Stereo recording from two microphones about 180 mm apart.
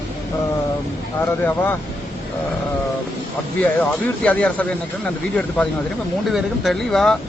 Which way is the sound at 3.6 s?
10° left (ahead or behind).